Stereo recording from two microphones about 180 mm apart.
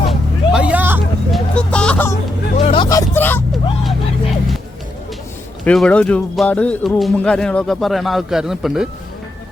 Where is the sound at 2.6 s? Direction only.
30° left (ahead or behind).